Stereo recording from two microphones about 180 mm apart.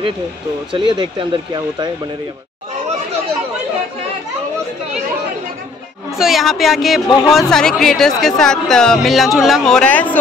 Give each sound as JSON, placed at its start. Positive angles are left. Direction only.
{"t": 0.7, "sound": "speech", "side_deg": -25}
{"t": 6.1, "sound": "speech", "side_deg": 0}